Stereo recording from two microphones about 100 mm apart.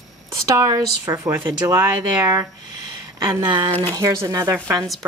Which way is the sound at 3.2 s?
50° right (ahead or behind).